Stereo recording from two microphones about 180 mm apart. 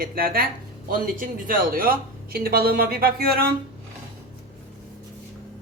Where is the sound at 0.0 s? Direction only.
55° right (ahead or behind).